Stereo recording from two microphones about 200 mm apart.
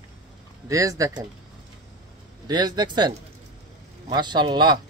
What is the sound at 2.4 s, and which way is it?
Speech, 20° right (ahead or behind).